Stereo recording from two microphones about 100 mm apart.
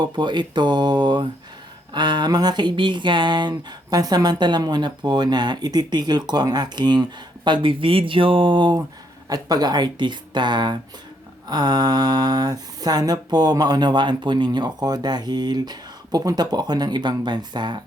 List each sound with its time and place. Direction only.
0.0 s speech: 50° right (ahead or behind)